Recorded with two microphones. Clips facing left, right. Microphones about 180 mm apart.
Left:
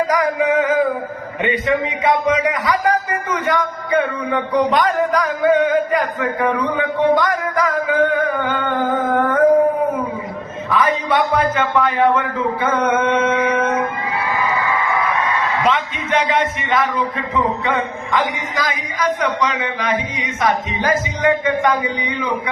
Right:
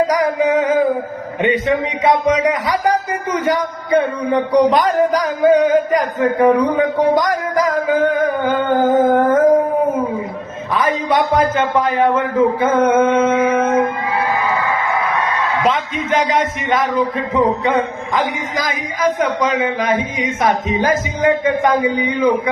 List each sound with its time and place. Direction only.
0.1 s music: 35° right (ahead or behind)
1.6 s speech: 35° right (ahead or behind)
10.7 s a man's voice: 40° right (ahead or behind)
12.5 s mantra: 40° right (ahead or behind)
15.6 s a man's voice: 40° right (ahead or behind)